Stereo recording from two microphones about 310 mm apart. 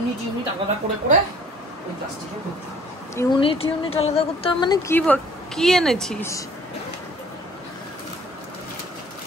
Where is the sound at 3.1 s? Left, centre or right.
Centre.